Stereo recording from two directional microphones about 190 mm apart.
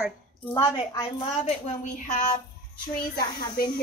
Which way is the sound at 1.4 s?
40° left (ahead or behind).